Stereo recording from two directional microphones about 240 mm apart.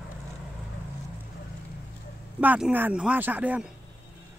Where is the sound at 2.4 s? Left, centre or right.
Centre.